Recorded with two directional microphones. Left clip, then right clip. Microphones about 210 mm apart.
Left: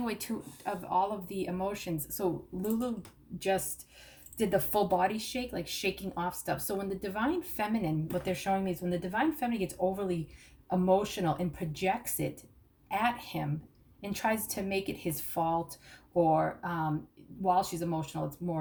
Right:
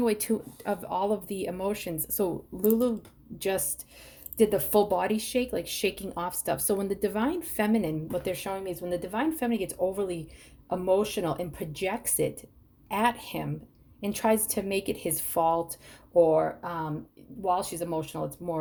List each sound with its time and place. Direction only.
0.0 s speech: 55° right (ahead or behind)
4.4 s speech: 55° right (ahead or behind)